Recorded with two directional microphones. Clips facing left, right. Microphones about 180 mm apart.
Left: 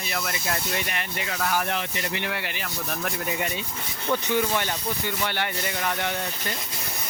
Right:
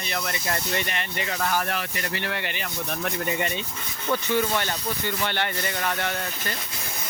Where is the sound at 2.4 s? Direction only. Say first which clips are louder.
Right 1 dB; 5° left (ahead or behind).